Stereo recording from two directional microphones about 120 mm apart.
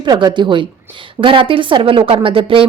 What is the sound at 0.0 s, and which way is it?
Speech, 35° right (ahead or behind).